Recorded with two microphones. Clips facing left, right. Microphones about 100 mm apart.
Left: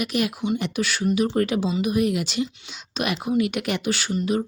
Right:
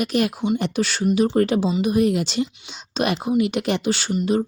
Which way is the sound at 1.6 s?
20° right (ahead or behind).